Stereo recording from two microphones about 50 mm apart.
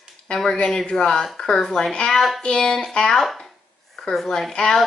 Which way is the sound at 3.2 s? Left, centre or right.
Centre.